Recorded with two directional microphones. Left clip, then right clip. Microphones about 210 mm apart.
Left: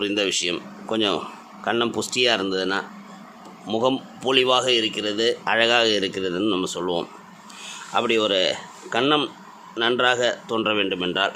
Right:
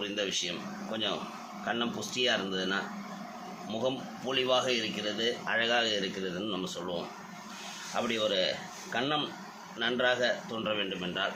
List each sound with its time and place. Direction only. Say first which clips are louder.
0.0 s a man's voice: left 10 dB; 55° left (ahead or behind)